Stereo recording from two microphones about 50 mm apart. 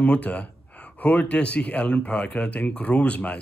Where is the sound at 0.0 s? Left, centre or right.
Left.